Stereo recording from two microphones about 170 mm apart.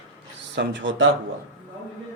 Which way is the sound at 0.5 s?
90° right.